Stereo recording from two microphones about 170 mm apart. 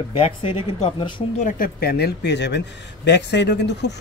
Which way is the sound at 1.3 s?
55° left (ahead or behind).